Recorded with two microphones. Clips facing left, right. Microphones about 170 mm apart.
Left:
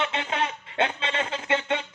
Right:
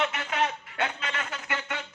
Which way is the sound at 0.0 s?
25° left (ahead or behind).